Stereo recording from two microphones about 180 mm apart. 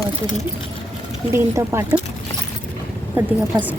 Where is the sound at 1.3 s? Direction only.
15° right (ahead or behind).